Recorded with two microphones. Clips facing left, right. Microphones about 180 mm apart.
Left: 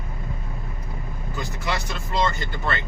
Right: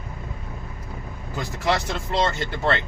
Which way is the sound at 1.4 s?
90° right.